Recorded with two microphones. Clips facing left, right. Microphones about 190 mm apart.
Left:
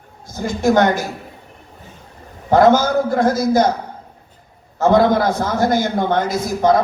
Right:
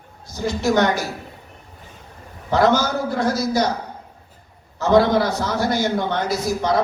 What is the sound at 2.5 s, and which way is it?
A man's voice, 50° left (ahead or behind).